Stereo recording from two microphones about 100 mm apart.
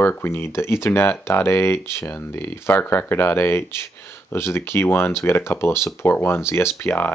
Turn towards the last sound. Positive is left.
turn(degrees=25)  # may be behind; listen again after turning